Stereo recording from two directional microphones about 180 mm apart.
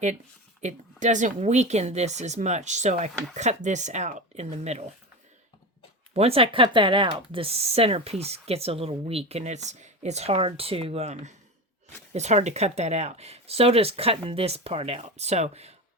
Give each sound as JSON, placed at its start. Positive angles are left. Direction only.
{"t": 0.6, "sound": "speech", "side_deg": -40}
{"t": 6.1, "sound": "speech", "side_deg": -35}